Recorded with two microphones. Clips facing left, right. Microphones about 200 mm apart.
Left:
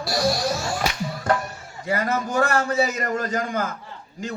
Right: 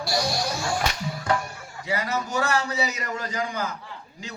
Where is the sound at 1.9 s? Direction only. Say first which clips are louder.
Left 4 dB; 50° left (ahead or behind).